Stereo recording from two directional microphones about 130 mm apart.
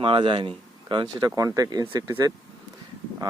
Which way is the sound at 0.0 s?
40° right (ahead or behind).